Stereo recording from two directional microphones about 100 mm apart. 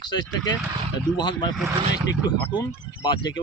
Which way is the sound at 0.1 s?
45° left (ahead or behind).